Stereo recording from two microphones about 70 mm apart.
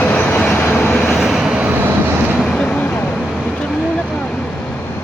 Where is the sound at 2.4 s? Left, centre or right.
Centre.